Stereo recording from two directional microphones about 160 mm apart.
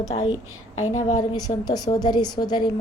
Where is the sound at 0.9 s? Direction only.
45° left (ahead or behind).